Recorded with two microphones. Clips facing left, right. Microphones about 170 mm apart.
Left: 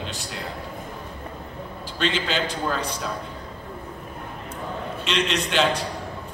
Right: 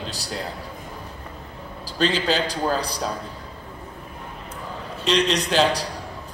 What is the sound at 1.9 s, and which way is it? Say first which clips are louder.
Speech: right 3 dB; 35° right (ahead or behind).